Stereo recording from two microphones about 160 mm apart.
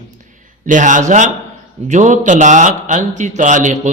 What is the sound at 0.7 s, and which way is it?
Speech, 50° right (ahead or behind).